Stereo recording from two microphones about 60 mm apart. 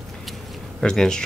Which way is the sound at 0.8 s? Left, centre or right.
Centre.